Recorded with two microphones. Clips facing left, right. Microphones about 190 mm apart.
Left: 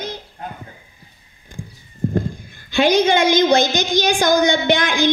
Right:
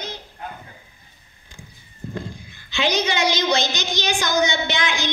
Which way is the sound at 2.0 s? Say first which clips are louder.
Left 11 dB; 50° left (ahead or behind).